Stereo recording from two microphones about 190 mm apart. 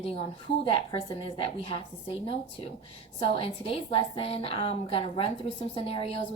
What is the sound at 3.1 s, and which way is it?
A woman's voice, 30° left (ahead or behind).